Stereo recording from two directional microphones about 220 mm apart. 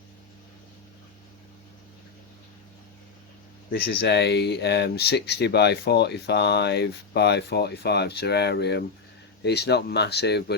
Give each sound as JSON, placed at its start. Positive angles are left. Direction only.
{"t": 3.7, "sound": "speech", "side_deg": 50}